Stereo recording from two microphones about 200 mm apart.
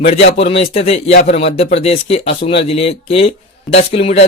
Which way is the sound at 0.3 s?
30° left (ahead or behind).